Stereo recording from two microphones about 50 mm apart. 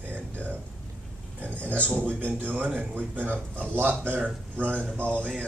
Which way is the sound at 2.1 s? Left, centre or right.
Right.